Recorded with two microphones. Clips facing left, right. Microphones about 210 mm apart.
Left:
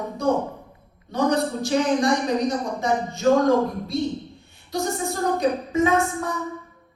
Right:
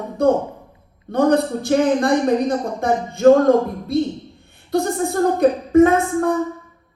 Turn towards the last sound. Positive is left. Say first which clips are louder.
# right 6 dB
turn(degrees=-55)  # may be behind; listen again after turning